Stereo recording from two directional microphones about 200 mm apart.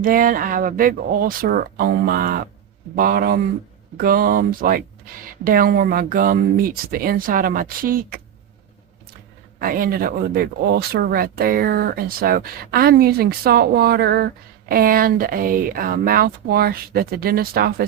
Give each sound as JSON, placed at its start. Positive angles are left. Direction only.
{"t": 0.0, "sound": "speech", "side_deg": -45}
{"t": 9.6, "sound": "speech", "side_deg": -45}